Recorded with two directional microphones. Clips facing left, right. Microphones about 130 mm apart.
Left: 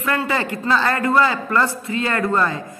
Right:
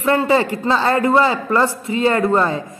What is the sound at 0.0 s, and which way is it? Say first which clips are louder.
A woman's voice: right 6 dB; 25° right (ahead or behind).